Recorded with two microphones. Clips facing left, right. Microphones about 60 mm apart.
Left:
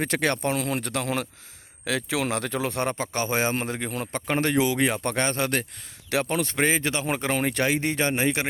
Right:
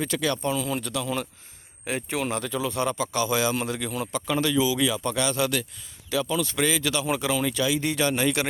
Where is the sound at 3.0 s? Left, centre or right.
Left.